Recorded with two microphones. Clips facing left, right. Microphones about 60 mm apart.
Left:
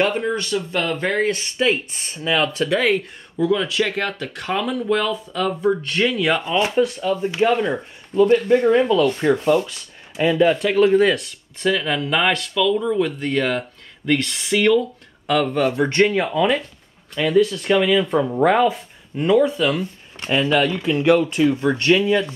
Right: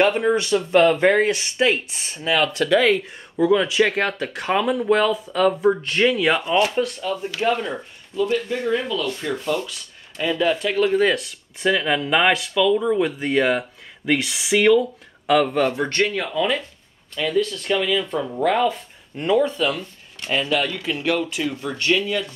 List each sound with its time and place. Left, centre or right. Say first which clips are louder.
0.0 s speech: right 2 dB; centre
2.8 s speech: right 1 dB; centre
3.3 s speech: right 2 dB; centre
7.2 s speech: left 6 dB; left
7.4 s speech: left 3 dB; centre
8.3 s speech: left 7 dB; left
10.1 s speech: left 5 dB; centre
10.7 s speech: left 3 dB; centre
15.9 s speech: left 5 dB; centre
19.1 s speech: left 3 dB; centre
19.5 s speech: left 3 dB; centre
21.5 s speech: left 5 dB; left